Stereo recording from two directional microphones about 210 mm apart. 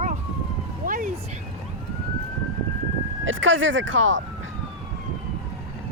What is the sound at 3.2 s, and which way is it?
Speech, 65° right (ahead or behind).